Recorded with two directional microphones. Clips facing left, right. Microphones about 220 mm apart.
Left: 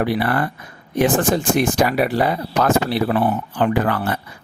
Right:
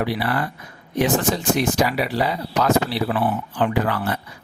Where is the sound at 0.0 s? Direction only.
50° left (ahead or behind).